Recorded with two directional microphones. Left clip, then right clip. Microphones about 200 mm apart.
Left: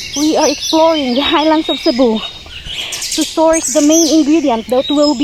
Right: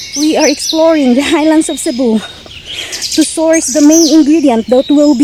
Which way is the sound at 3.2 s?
25° right (ahead or behind).